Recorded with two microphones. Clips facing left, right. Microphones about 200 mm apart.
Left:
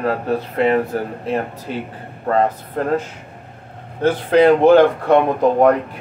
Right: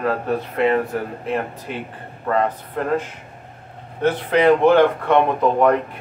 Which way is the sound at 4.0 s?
30° left (ahead or behind).